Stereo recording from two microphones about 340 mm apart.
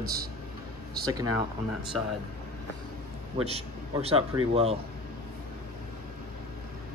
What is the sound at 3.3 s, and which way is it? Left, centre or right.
Speech, centre.